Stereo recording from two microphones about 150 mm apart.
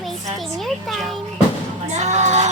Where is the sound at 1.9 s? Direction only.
50° right (ahead or behind).